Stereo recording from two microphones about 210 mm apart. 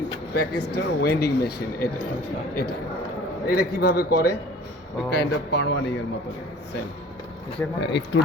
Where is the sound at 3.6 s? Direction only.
45° left (ahead or behind).